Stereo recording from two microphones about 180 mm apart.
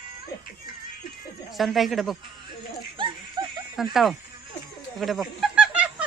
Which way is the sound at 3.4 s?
25° right (ahead or behind).